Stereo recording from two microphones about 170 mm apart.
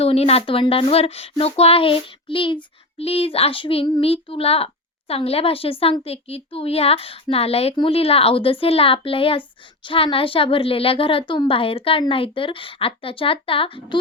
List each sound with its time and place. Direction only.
0.0 s a woman's voice: 35° left (ahead or behind)